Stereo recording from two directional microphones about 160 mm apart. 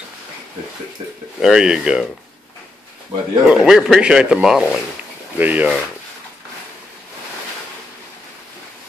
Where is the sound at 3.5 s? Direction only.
5° right (ahead or behind).